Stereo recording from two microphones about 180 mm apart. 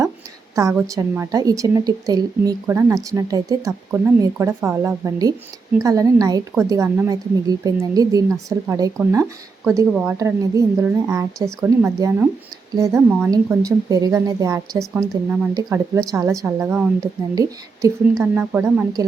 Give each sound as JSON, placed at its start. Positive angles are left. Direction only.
{"t": 0.5, "sound": "a woman's voice", "side_deg": -15}
{"t": 13.3, "sound": "a woman's voice", "side_deg": -20}